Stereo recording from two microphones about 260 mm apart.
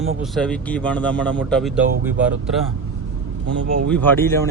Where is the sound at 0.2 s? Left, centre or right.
Centre.